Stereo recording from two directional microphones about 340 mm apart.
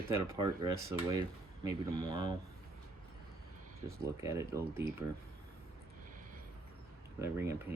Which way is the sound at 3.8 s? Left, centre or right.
Centre.